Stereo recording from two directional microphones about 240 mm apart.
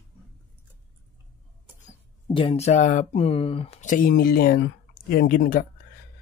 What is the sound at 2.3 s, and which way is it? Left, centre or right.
Speech, left.